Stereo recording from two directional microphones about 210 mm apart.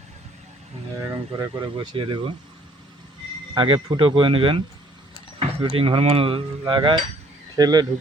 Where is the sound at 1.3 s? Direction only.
20° right (ahead or behind).